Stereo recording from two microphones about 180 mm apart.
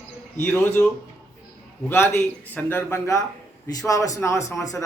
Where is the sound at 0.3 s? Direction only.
10° left (ahead or behind).